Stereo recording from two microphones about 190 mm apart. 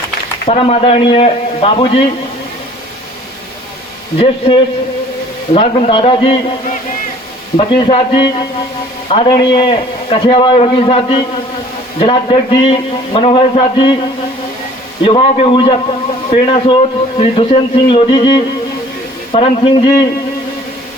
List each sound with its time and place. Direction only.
0.4 s speech: 35° left (ahead or behind)
4.2 s a man's voice: 25° left (ahead or behind)
7.5 s a man's voice: 30° left (ahead or behind)
15.0 s a man's voice: 30° left (ahead or behind)